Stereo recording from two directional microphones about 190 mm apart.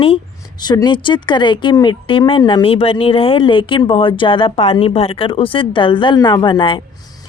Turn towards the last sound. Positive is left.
turn(degrees=25)  # may be behind; listen again after turning